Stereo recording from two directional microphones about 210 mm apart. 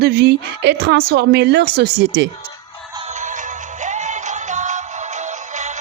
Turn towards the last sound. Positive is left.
turn(degrees=-35)  # may be behind; listen again after turning